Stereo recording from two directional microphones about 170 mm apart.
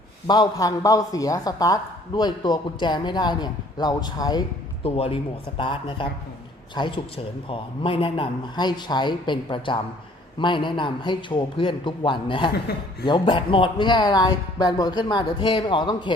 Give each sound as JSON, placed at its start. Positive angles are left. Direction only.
{"t": 0.3, "sound": "speech", "side_deg": 25}
{"t": 4.9, "sound": "speech", "side_deg": 35}